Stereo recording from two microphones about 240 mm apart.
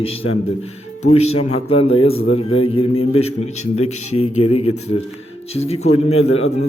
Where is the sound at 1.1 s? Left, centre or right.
Left.